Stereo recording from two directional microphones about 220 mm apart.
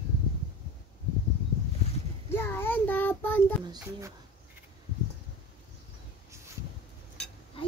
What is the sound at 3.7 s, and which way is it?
Speech, 15° right (ahead or behind).